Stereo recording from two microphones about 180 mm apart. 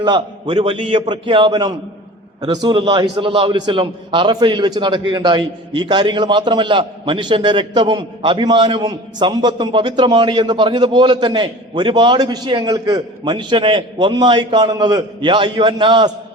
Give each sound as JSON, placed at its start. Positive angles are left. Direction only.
{"t": 0.0, "sound": "a man's voice", "side_deg": -25}